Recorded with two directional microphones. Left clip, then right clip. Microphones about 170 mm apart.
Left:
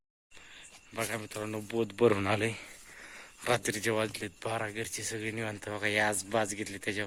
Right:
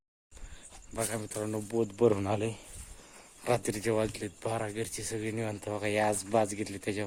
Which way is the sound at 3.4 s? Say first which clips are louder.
Even; centre (ahead or behind).